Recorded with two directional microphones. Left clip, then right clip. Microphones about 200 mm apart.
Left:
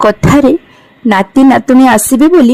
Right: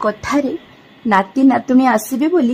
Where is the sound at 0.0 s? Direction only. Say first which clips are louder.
Left 10 dB; 40° left (ahead or behind).